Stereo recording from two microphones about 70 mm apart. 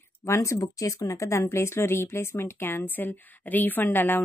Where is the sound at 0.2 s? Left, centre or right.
Left.